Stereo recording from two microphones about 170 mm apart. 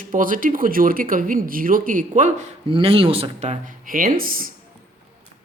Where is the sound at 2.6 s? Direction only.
30° right (ahead or behind); by 4.5 s 55° right (ahead or behind).